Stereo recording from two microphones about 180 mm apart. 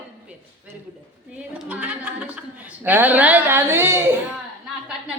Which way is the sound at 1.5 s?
10° right (ahead or behind).